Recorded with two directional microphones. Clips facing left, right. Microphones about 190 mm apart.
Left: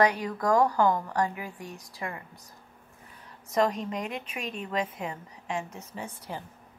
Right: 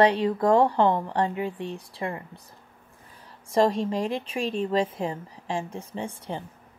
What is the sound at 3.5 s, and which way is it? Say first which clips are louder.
Speech: right 4 dB; 30° right (ahead or behind).